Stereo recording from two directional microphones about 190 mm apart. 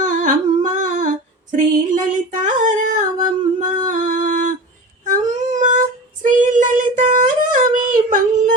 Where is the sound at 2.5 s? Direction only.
40° right (ahead or behind).